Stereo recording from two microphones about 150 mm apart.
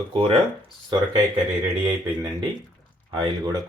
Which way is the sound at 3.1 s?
30° right (ahead or behind).